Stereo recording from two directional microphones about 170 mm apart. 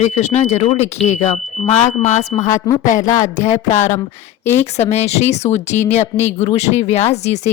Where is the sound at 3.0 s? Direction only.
20° left (ahead or behind).